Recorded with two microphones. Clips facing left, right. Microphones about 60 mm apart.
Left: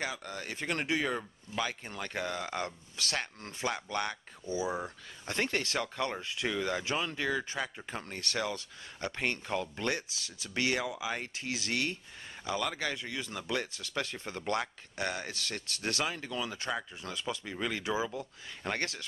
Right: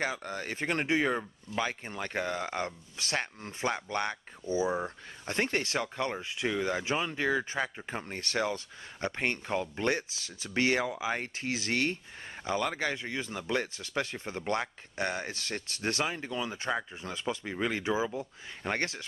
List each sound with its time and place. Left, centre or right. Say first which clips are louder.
0.0 s speech: right 4 dB; right